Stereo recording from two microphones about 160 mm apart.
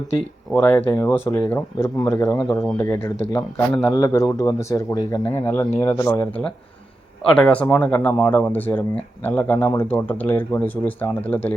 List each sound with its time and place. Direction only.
0.5 s a man's voice: 10° left (ahead or behind)